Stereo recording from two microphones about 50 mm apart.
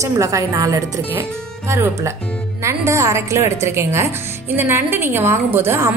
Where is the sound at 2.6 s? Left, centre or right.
Right.